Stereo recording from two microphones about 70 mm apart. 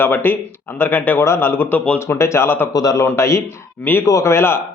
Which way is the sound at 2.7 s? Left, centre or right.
Left.